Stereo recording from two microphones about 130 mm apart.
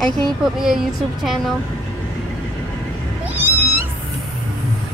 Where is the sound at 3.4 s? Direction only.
15° right (ahead or behind).